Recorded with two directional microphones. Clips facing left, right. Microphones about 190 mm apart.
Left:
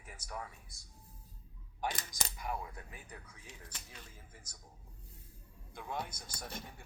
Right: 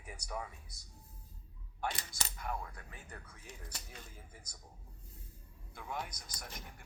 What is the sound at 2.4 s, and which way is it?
Speech, 10° left (ahead or behind).